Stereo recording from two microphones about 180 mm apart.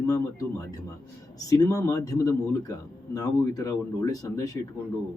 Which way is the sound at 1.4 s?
20° left (ahead or behind).